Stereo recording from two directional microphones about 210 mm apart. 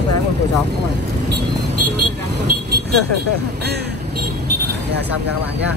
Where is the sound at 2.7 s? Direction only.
50° right (ahead or behind).